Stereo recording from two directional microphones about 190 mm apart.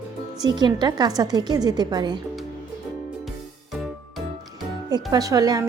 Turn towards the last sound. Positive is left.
turn(degrees=-20)  # may be behind; listen again after turning